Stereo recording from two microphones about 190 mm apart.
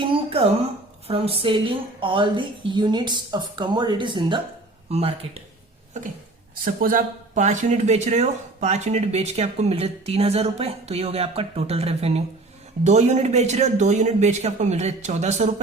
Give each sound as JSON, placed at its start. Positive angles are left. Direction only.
{"t": 0.0, "sound": "a sound", "side_deg": -30}
{"t": 1.0, "sound": "a woman's voice", "side_deg": -30}
{"t": 6.8, "sound": "speech", "side_deg": -45}